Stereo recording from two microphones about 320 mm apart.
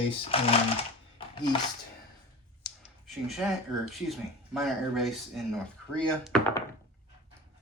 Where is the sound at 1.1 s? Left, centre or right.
Centre.